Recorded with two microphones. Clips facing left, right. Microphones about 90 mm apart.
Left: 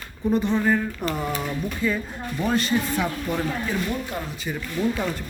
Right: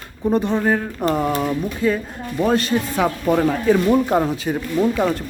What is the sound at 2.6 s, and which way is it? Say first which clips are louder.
Speech: right 4 dB; 70° right (ahead or behind).